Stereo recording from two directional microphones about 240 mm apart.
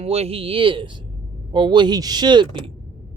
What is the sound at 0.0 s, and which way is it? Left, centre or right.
Speech, right.